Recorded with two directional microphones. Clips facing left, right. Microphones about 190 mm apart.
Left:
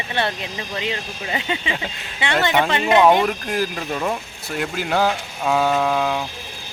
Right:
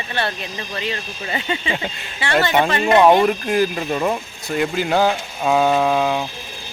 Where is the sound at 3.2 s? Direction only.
Centre (ahead or behind).